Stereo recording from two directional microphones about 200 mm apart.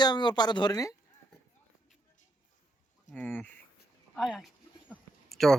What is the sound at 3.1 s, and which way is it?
Speech, 10° left (ahead or behind).